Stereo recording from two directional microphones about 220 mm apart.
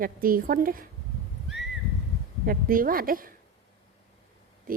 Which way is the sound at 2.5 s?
40° right (ahead or behind).